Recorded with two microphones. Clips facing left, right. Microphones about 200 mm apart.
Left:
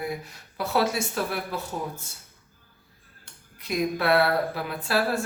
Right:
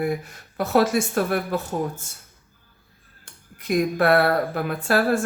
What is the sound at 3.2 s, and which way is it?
Speech, 50° right (ahead or behind).